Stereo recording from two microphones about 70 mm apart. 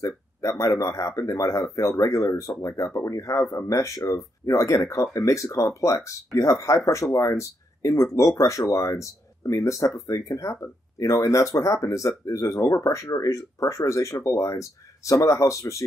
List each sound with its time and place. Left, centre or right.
0.0 s speech: left